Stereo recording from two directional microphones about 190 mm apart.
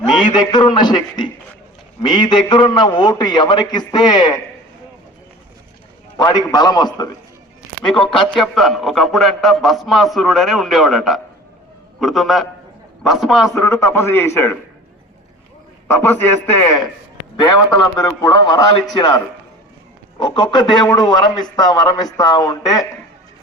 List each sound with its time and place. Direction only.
0.3 s a man's voice: 25° left (ahead or behind)
6.1 s a man's voice: 20° left (ahead or behind)
7.9 s a man's voice: centre (ahead or behind)
13.5 s a man's voice: 15° left (ahead or behind)
15.9 s a man's voice: 10° left (ahead or behind)